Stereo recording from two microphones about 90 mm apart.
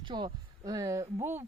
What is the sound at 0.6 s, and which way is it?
Speech, 40° right (ahead or behind).